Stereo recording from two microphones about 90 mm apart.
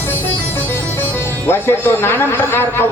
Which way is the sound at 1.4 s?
25° left (ahead or behind).